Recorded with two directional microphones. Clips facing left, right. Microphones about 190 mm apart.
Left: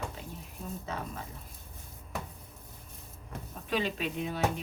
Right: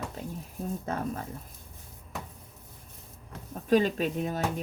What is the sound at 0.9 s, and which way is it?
Speech, 50° right (ahead or behind).